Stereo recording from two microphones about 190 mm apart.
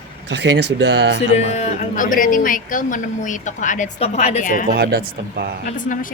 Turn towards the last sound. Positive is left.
turn(degrees=45)  # may be behind; listen again after turning